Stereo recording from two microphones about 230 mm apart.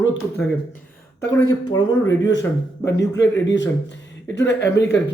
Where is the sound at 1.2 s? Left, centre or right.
Left.